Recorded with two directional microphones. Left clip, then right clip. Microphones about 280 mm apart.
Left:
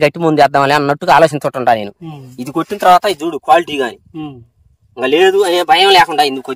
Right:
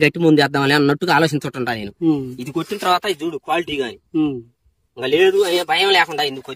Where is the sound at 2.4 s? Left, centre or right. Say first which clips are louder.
Left 8 dB; centre.